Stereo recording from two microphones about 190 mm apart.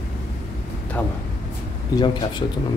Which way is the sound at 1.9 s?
25° left (ahead or behind).